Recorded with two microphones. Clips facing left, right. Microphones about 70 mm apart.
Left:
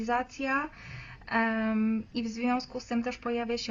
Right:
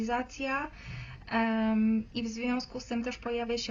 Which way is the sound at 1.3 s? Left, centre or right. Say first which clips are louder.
Even; left.